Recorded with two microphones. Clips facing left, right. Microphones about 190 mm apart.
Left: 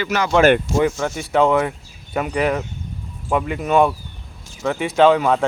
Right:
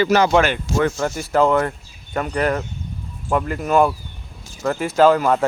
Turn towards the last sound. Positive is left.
turn(degrees=0)  # may be behind; listen again after turning